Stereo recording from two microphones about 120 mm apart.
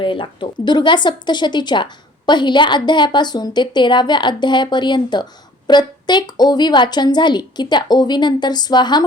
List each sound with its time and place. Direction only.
0.0 s speech: 45° left (ahead or behind)